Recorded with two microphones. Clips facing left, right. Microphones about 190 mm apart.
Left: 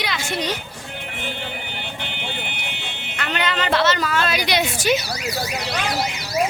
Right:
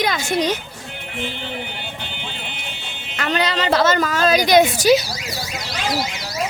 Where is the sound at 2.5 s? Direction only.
65° left (ahead or behind).